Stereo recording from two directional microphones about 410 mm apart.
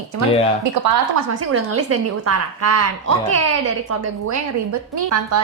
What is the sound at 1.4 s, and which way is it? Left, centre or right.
A woman's voice, right.